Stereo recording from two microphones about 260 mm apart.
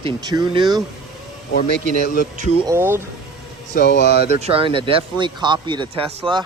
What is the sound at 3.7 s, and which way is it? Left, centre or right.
Speech, left.